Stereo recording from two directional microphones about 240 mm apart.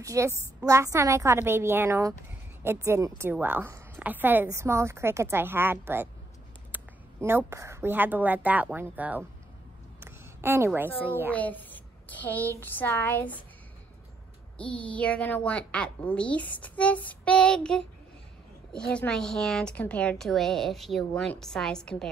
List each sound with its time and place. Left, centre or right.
0.0 s a woman's voice: centre
9.9 s a sound: centre
11.1 s a woman's voice: centre
11.3 s a child's voice: centre
14.6 s a woman's voice: centre